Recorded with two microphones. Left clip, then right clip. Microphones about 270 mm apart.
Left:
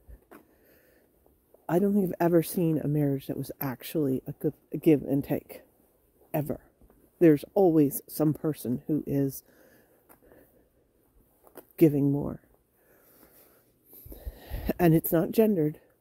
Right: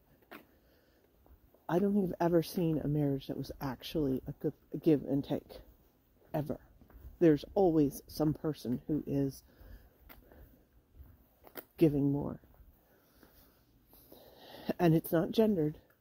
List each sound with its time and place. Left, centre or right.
1.7 s speech: left
11.7 s speech: left
14.0 s a sound: left